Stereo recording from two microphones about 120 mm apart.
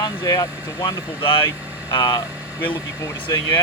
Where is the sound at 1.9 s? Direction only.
30° left (ahead or behind).